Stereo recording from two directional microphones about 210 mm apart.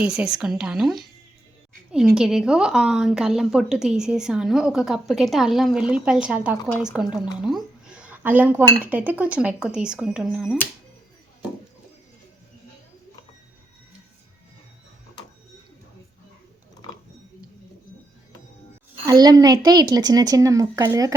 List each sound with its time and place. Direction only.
0.0 s a woman's voice: 5° right (ahead or behind)
7.4 s dishes: 5° right (ahead or behind)
8.6 s a woman's voice: 10° right (ahead or behind)
19.0 s a woman's voice: 20° right (ahead or behind)